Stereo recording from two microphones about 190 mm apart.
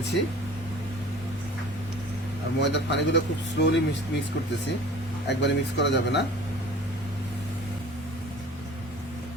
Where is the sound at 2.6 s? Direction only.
65° left (ahead or behind).